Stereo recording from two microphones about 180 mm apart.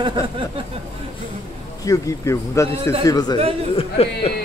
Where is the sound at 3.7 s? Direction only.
30° left (ahead or behind).